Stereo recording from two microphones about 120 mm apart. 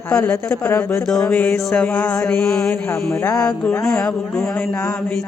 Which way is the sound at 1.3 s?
15° left (ahead or behind).